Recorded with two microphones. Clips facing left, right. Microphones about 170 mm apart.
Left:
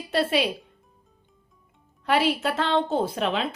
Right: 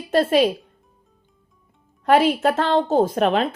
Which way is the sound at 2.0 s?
50° right (ahead or behind).